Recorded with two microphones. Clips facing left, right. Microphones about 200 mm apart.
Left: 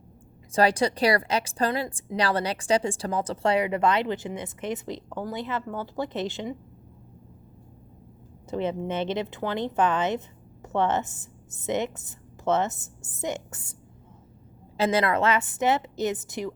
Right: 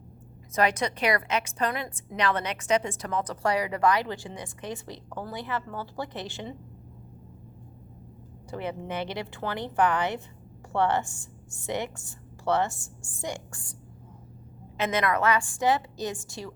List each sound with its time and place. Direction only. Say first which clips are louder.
0.5 s a woman's voice: left 4 dB; 30° left (ahead or behind)
8.4 s a woman's voice: left 5 dB; 20° left (ahead or behind)
14.8 s a woman's voice: left 3 dB; 30° left (ahead or behind)